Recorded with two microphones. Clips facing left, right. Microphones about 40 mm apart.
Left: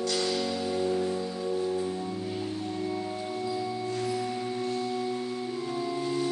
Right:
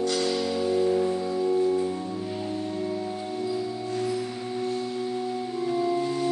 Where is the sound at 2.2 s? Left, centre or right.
Centre.